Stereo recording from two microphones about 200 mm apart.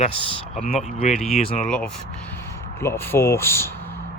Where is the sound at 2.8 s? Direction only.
10° left (ahead or behind).